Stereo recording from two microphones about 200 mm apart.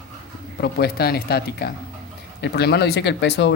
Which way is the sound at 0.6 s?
50° left (ahead or behind).